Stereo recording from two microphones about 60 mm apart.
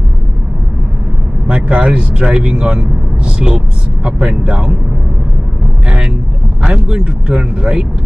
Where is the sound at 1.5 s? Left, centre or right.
Centre.